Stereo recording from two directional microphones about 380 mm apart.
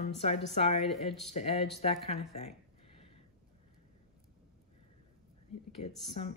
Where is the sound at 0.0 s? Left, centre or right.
Centre.